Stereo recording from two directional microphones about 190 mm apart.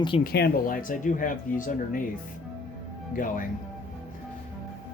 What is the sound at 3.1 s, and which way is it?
Speech, 45° left (ahead or behind).